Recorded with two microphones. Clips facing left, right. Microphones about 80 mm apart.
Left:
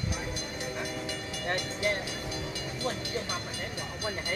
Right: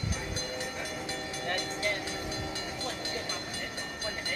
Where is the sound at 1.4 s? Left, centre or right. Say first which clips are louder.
Left 3 dB; left.